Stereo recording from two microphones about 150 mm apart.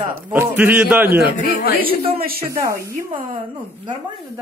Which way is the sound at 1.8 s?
35° right (ahead or behind).